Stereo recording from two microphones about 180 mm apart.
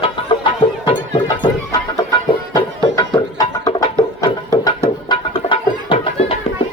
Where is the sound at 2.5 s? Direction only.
25° left (ahead or behind).